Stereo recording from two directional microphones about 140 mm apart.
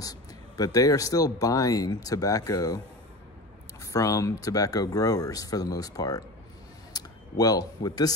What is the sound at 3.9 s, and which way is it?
Speech, 25° left (ahead or behind).